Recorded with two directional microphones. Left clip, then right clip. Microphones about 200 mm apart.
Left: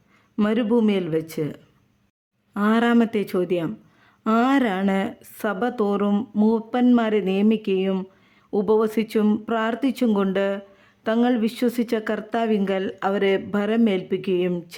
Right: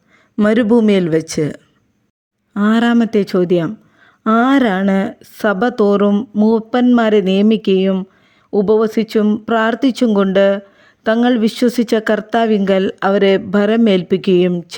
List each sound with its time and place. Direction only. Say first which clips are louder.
0.3 s speech: right 9 dB; 25° right (ahead or behind)